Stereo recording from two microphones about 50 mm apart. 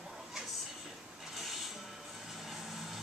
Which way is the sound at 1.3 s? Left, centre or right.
Centre.